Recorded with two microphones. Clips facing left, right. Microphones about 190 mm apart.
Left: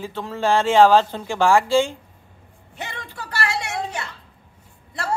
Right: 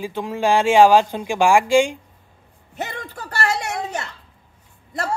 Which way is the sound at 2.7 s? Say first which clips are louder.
Right 4 dB; 45° right (ahead or behind).